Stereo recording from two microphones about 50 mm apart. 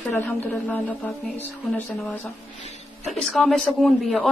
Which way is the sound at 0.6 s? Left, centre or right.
Left.